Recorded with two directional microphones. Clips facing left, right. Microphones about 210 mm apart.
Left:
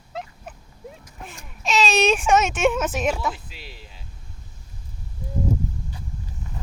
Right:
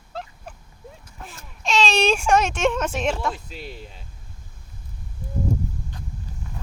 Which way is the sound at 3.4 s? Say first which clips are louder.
Right 7 dB; 45° right (ahead or behind).